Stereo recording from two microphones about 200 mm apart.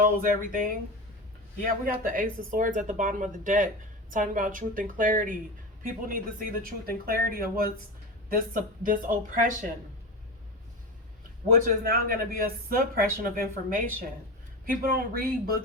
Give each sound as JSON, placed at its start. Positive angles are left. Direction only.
{"t": 0.2, "sound": "speech", "side_deg": -45}
{"t": 11.4, "sound": "speech", "side_deg": -45}